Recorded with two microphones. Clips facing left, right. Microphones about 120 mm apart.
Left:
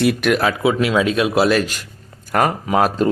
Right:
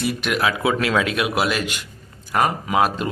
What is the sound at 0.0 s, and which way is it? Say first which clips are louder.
Speech: left 7 dB; 65° left (ahead or behind).